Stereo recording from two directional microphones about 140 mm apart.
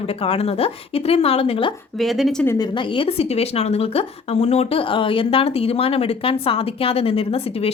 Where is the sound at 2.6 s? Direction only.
35° left (ahead or behind).